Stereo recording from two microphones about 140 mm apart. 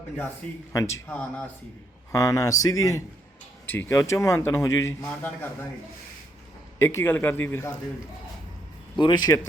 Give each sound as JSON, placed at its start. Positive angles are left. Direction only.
{"t": 0.7, "sound": "speech", "side_deg": 20}
{"t": 2.1, "sound": "a man's voice", "side_deg": 25}
{"t": 6.7, "sound": "a man's voice", "side_deg": 20}
{"t": 9.0, "sound": "a man's voice", "side_deg": 35}